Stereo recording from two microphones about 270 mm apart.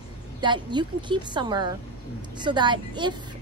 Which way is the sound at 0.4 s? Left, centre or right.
Centre.